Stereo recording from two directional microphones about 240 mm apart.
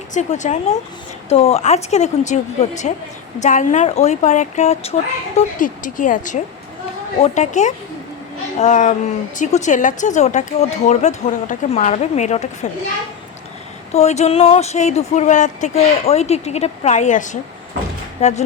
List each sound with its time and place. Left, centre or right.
0.1 s a woman's voice: left
13.9 s a woman's voice: left